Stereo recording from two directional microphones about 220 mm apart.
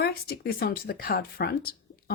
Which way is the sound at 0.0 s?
45° left (ahead or behind).